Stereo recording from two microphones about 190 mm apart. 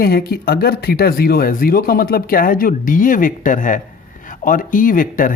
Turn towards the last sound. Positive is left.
turn(degrees=45)  # may be behind; listen again after turning